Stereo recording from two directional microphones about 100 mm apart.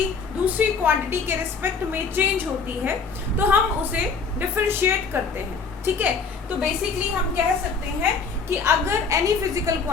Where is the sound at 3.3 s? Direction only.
20° right (ahead or behind).